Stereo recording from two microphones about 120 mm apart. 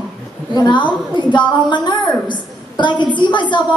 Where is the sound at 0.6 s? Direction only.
40° left (ahead or behind).